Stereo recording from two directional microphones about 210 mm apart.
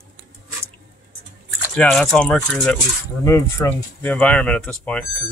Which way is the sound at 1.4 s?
Centre (ahead or behind).